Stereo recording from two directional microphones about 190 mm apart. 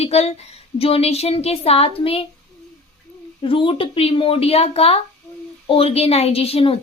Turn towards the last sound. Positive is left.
turn(degrees=30)  # may be behind; listen again after turning